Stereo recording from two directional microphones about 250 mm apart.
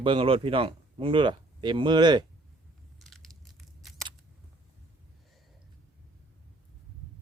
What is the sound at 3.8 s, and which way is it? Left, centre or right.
Scissors, centre.